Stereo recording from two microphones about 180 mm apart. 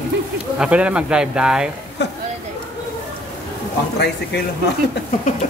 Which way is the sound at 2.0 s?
75° left (ahead or behind).